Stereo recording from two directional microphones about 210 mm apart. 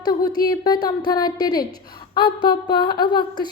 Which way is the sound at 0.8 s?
20° left (ahead or behind).